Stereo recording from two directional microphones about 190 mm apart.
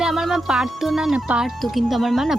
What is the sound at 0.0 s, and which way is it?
Speech, centre (ahead or behind).